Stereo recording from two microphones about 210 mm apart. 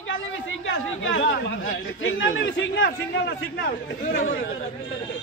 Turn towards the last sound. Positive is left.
turn(degrees=40)  # may be behind; listen again after turning